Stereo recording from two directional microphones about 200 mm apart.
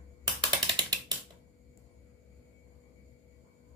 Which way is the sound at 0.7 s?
20° right (ahead or behind).